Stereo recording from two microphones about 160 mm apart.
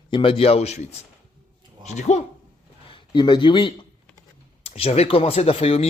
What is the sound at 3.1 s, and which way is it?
Speech, 30° left (ahead or behind).